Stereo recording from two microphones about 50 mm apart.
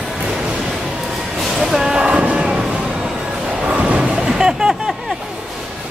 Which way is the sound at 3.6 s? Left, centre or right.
Right.